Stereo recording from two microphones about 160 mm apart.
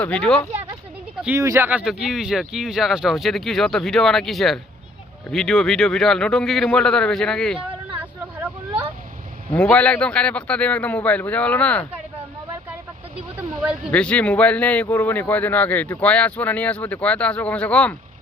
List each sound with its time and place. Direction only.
0.0 s speech: 5° left (ahead or behind)
1.4 s speech: 20° right (ahead or behind)
1.8 s speech: centre (ahead or behind)
9.6 s speech: 5° left (ahead or behind)
13.9 s speech: 5° left (ahead or behind)